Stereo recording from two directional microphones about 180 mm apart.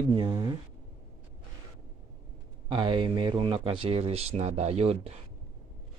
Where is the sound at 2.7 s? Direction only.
25° right (ahead or behind).